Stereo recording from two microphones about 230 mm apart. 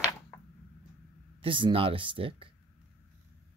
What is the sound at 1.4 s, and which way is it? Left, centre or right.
Speech, right.